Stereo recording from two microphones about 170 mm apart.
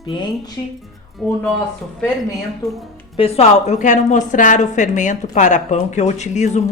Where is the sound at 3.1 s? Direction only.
35° left (ahead or behind).